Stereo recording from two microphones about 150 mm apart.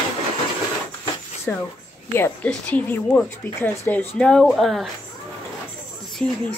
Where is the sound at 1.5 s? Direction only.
10° left (ahead or behind).